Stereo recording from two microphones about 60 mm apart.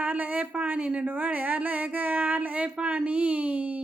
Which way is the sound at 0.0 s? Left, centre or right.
Right.